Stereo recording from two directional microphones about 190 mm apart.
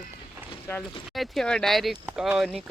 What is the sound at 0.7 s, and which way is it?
Speech, 10° left (ahead or behind).